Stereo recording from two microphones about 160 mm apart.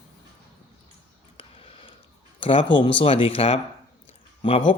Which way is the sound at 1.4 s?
35° left (ahead or behind).